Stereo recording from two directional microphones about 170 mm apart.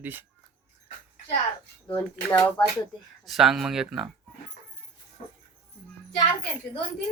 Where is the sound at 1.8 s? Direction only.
10° left (ahead or behind).